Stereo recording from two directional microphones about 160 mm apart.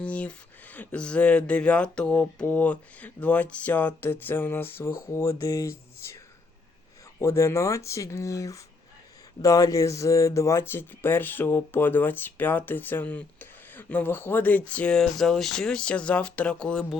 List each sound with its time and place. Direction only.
0.0 s speech: 5° left (ahead or behind)
7.2 s speech: 20° left (ahead or behind)